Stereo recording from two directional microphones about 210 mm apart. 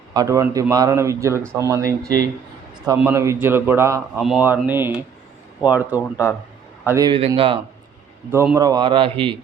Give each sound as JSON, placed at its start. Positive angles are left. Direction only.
{"t": 0.1, "sound": "a man's voice", "side_deg": -15}
{"t": 8.3, "sound": "a man's voice", "side_deg": -10}